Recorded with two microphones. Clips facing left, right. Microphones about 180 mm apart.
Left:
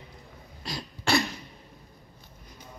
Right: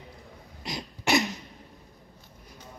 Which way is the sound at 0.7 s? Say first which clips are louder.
Right 1 dB; 20° right (ahead or behind).